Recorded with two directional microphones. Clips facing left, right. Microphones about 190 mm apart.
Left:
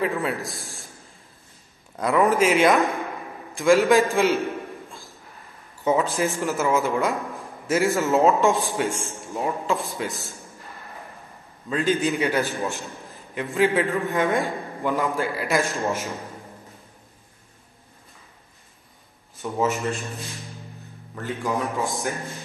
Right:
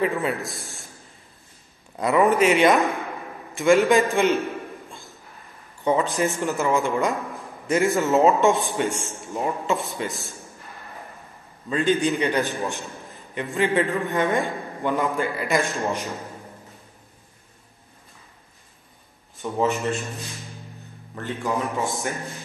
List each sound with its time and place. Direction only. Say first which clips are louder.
0.0 s speech: right 1 dB; centre (ahead or behind)
2.0 s speech: right 1 dB; centre (ahead or behind)
3.5 s a sound: even; centre (ahead or behind)
5.9 s speech: even; centre (ahead or behind)
11.7 s speech: right 1 dB; centre (ahead or behind)
19.4 s speech: right 1 dB; centre (ahead or behind)